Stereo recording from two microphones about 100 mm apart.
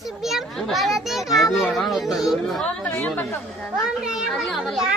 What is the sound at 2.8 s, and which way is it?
Speech, 20° left (ahead or behind).